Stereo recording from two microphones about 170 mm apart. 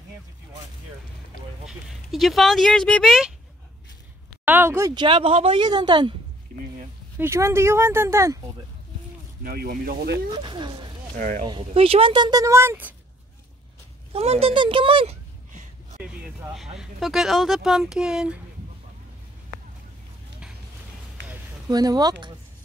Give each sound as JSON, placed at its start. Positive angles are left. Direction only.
{"t": 1.7, "sound": "speech", "side_deg": 0}
{"t": 4.5, "sound": "speech", "side_deg": -15}
{"t": 4.9, "sound": "speech", "side_deg": -30}
{"t": 6.5, "sound": "a sound", "side_deg": -55}
{"t": 7.2, "sound": "speech", "side_deg": -15}
{"t": 9.4, "sound": "speech", "side_deg": -60}
{"t": 10.3, "sound": "speech", "side_deg": -30}
{"t": 11.1, "sound": "speech", "side_deg": -50}
{"t": 11.4, "sound": "speech", "side_deg": -30}
{"t": 14.1, "sound": "speech", "side_deg": -35}
{"t": 16.0, "sound": "speech", "side_deg": -5}
{"t": 21.6, "sound": "speech", "side_deg": -25}